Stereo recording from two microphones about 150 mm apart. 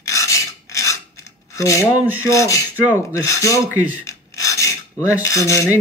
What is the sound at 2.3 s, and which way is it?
Speech, 20° left (ahead or behind).